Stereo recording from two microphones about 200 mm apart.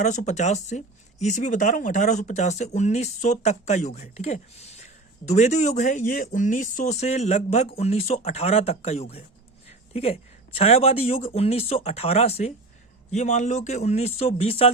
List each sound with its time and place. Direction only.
0.0 s speech: 35° left (ahead or behind)